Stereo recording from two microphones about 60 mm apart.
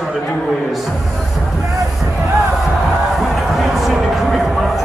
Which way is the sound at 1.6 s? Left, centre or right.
Right.